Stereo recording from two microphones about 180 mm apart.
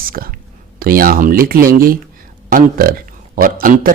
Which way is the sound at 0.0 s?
50° right (ahead or behind).